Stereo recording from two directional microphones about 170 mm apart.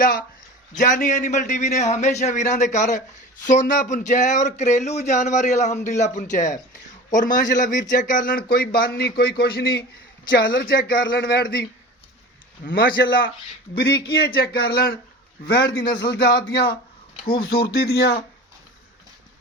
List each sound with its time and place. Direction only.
0.0 s speech: 55° left (ahead or behind)
10.2 s speech: 80° left
12.6 s speech: 65° left (ahead or behind)
13.0 s a man's voice: 90° left
13.7 s speech: 75° left (ahead or behind)
17.2 s speech: 65° left (ahead or behind)